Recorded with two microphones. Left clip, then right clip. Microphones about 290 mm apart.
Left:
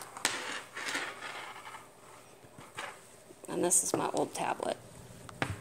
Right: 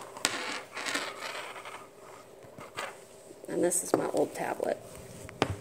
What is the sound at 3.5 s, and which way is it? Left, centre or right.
A woman's voice, centre.